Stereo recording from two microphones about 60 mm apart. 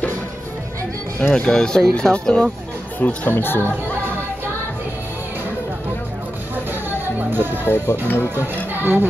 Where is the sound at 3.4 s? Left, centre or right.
Left.